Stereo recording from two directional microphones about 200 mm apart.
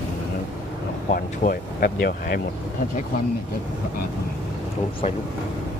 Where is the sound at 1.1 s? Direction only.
50° left (ahead or behind).